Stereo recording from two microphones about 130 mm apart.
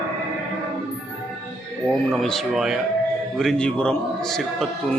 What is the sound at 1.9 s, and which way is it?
A man's voice, 5° left (ahead or behind).